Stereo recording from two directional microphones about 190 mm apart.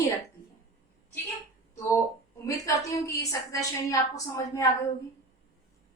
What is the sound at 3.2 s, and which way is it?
A woman's voice, 15° left (ahead or behind).